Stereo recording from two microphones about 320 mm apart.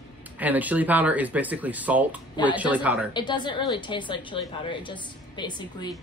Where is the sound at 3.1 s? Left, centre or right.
Centre.